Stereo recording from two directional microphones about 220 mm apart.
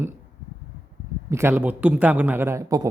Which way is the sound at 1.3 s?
10° right (ahead or behind).